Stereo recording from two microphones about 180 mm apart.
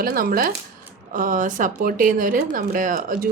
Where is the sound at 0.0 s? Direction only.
55° right (ahead or behind).